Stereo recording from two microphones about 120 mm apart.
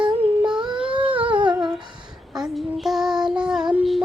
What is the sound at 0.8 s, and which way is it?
Humming, 10° right (ahead or behind).